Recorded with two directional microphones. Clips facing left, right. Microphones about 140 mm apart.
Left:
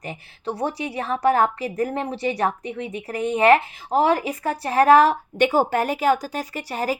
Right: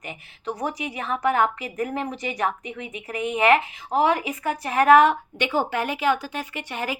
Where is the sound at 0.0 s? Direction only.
35° left (ahead or behind).